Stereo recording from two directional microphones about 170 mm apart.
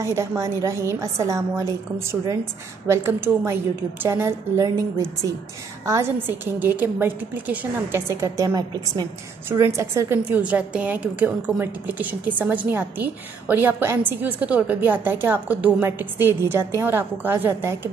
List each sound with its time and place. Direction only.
0.0 s a woman's voice: 15° right (ahead or behind)